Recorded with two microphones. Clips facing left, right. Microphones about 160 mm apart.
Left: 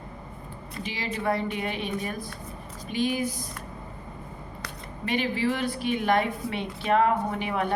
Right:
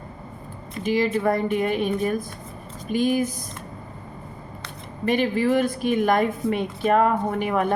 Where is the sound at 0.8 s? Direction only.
50° right (ahead or behind).